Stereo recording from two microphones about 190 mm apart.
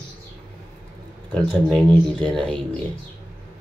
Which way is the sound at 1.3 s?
5° left (ahead or behind).